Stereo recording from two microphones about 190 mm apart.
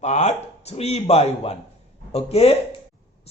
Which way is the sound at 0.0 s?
35° left (ahead or behind).